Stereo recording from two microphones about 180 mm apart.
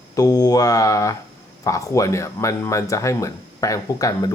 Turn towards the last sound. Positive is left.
turn(degrees=20)  # may be behind; listen again after turning